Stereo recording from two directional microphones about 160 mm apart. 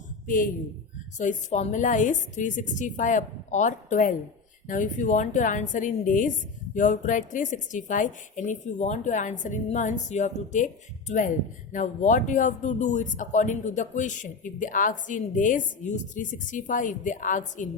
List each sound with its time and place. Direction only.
0.3 s a man's voice: 60° left (ahead or behind)
11.7 s speech: 50° left (ahead or behind)